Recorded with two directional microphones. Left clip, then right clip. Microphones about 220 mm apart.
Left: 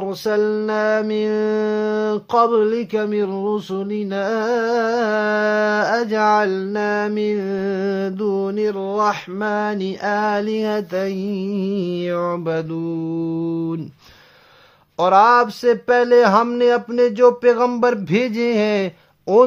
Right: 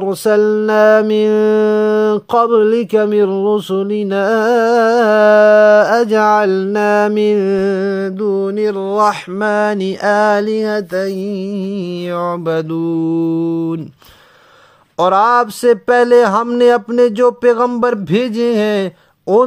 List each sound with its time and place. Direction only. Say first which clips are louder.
0.0 s mantra: right 7 dB; 35° right (ahead or behind)
15.0 s speech: right 2 dB; 25° right (ahead or behind)